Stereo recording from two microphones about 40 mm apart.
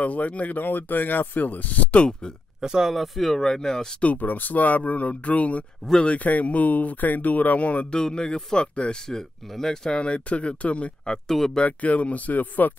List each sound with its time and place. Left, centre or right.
0.0 s speech: left
0.6 s speech: left
2.6 s speech: centre
2.9 s speech: centre
4.0 s speech: left
7.9 s a man's voice: left
9.5 s speech: centre
9.8 s speech: left
11.2 s speech: centre
11.6 s speech: left